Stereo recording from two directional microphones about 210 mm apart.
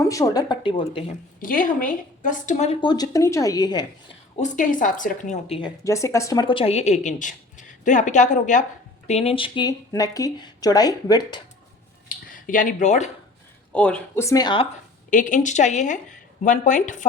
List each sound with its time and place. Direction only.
0.1 s speech: 15° left (ahead or behind)
1.4 s speech: 40° left (ahead or behind); by 4.2 s 20° left (ahead or behind)
4.4 s a woman's voice: 40° left (ahead or behind); by 11.4 s 20° left (ahead or behind)
12.0 s a sound: 40° left (ahead or behind)
13.7 s speech: 5° left (ahead or behind); by 14.7 s 20° left (ahead or behind)
15.1 s a woman's voice: 35° left (ahead or behind)